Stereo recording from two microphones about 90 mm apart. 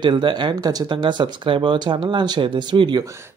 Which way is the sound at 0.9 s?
60° right (ahead or behind).